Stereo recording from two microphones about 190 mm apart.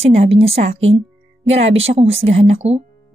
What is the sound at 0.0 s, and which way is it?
Speech, 30° right (ahead or behind).